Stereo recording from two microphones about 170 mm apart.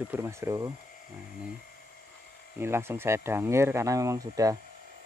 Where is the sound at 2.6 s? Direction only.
15° right (ahead or behind).